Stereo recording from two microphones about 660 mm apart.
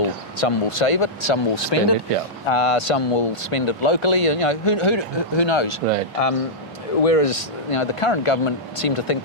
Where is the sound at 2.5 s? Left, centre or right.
Left.